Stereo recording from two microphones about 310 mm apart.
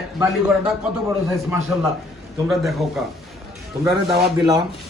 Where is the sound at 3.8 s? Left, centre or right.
Centre.